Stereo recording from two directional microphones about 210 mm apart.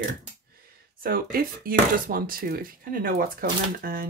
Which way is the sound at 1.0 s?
45° right (ahead or behind).